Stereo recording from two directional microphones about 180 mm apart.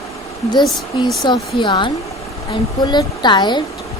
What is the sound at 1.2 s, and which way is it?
A woman's voice, 25° left (ahead or behind).